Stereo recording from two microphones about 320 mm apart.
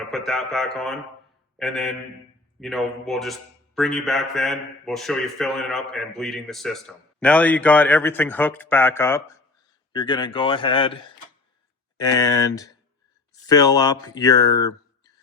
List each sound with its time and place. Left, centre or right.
0.1 s a man's voice: centre
11.9 s speech: centre